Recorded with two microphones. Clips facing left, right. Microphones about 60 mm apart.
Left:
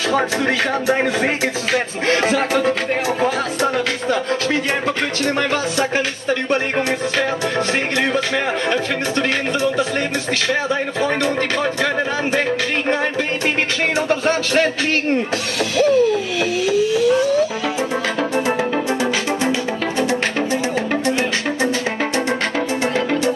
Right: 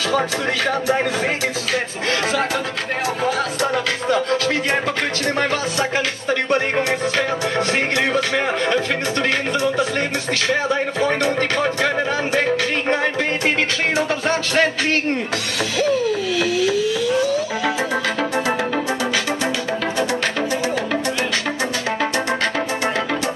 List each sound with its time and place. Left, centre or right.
2.2 s speech: left
3.2 s music: left
15.8 s a sound: left